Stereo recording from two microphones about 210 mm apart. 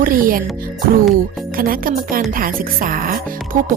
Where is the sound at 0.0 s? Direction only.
40° right (ahead or behind).